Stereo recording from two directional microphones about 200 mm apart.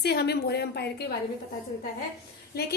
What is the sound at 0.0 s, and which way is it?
A woman's voice, 55° left (ahead or behind).